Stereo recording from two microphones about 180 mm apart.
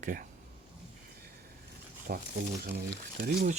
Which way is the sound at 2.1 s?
55° right (ahead or behind).